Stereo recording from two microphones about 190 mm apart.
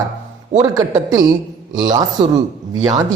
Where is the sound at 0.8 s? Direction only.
20° right (ahead or behind).